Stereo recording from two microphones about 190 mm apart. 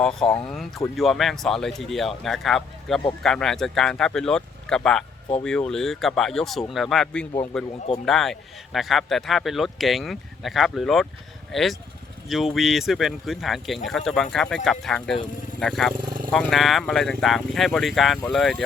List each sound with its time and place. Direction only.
0.0 s a man's voice: 5° left (ahead or behind)
16.0 s wild animals: 50° right (ahead or behind)
16.3 s a man's voice: centre (ahead or behind)